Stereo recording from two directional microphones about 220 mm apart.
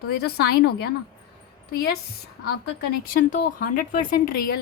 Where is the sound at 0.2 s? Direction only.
45° left (ahead or behind).